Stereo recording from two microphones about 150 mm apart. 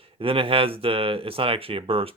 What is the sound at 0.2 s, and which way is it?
Speech, 35° right (ahead or behind).